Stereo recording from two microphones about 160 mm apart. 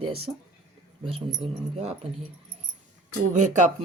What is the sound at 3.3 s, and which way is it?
Speech, 50° right (ahead or behind).